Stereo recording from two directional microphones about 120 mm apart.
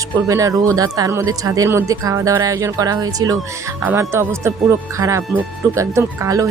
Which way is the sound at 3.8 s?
20° right (ahead or behind).